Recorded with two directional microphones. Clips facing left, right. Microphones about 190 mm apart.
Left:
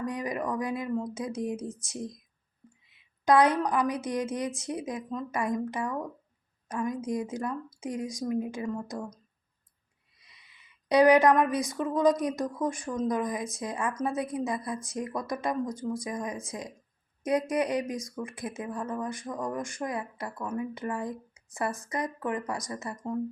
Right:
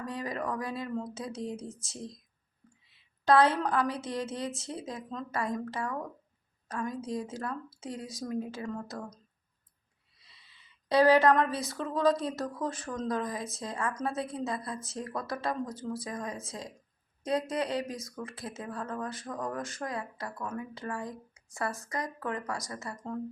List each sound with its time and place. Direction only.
0.0 s speech: 15° left (ahead or behind)
3.2 s speech: 15° left (ahead or behind)
10.2 s a sound: 15° left (ahead or behind)
11.7 s speech: 15° left (ahead or behind)
15.8 s speech: 5° right (ahead or behind)
16.0 s speech: 15° left (ahead or behind)